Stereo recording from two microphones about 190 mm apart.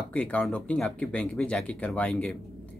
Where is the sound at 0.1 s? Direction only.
5° left (ahead or behind).